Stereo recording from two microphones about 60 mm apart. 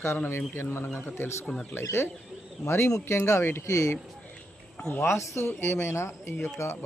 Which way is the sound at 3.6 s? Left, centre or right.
Left.